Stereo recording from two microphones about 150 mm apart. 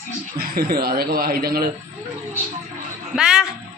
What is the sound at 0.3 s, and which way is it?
Speech, 85° right.